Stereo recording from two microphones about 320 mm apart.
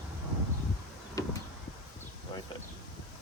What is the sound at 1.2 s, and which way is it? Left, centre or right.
Vehicle, centre.